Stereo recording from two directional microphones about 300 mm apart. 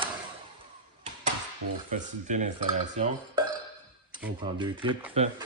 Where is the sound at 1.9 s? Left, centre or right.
Right.